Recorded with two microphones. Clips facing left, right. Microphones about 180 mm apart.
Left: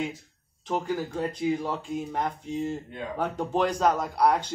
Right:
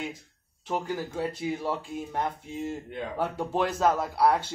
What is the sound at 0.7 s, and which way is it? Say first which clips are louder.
Speech: left 2 dB; 5° right (ahead or behind).